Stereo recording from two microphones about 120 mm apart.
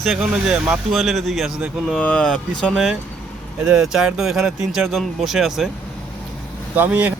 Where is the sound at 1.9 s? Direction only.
10° left (ahead or behind).